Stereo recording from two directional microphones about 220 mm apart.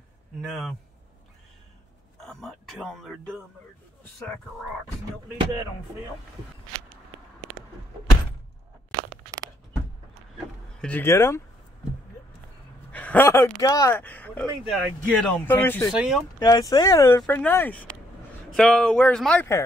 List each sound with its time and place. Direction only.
0.4 s speech: centre (ahead or behind)
2.1 s speech: centre (ahead or behind)
10.8 s speech: 10° left (ahead or behind)
12.9 s speech: 5° left (ahead or behind)
15.9 s speech: centre (ahead or behind)
16.3 s speech: 15° left (ahead or behind)